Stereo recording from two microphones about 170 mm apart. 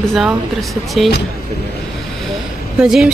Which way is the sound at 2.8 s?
Centre (ahead or behind).